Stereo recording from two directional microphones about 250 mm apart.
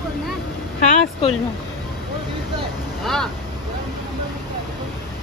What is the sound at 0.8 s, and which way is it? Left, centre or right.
Vehicle, left.